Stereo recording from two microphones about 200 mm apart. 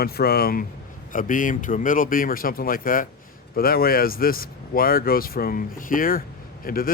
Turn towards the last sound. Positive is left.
turn(degrees=45)  # may be behind; listen again after turning